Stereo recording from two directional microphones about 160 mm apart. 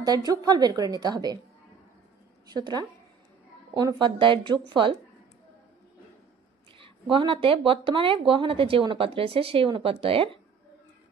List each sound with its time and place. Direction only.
0.0 s a woman's voice: 25° right (ahead or behind)
2.4 s a woman's voice: 25° right (ahead or behind)
6.8 s speech: 30° right (ahead or behind)